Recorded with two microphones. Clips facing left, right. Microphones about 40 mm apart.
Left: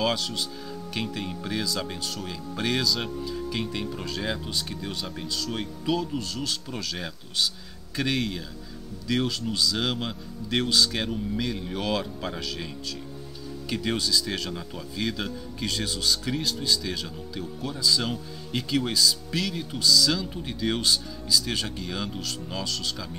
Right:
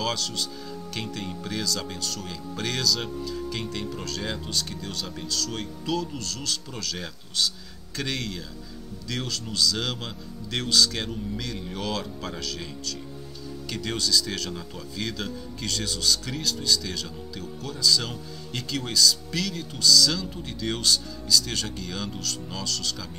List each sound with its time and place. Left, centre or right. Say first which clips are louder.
0.0 s speech: left 2 dB; centre
13.7 s speech: left 1 dB; centre